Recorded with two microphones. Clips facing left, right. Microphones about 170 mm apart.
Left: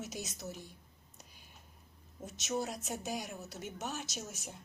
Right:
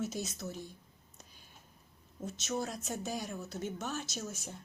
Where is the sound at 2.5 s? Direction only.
15° left (ahead or behind).